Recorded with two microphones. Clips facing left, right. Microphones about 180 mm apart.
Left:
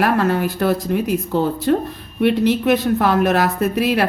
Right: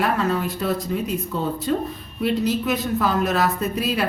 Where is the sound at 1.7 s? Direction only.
60° left (ahead or behind).